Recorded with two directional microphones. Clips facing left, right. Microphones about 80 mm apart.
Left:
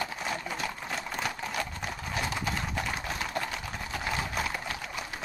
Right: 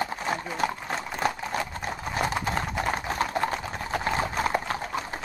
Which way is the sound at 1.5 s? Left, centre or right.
Right.